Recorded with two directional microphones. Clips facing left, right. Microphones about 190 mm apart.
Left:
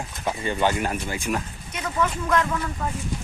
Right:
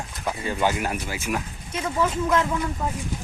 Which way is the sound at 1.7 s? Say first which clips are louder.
Right 2 dB; 30° right (ahead or behind).